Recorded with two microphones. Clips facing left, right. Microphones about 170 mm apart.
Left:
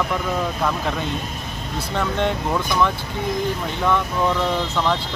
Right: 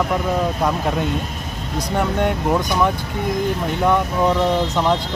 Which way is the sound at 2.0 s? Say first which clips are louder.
Right 2 dB; 15° right (ahead or behind).